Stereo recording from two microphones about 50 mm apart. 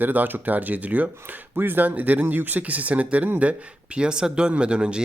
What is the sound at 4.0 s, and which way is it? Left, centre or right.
Speech, centre.